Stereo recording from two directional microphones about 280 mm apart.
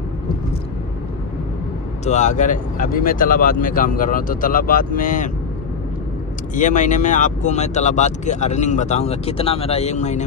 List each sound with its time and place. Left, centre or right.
2.0 s speech: left
6.5 s speech: left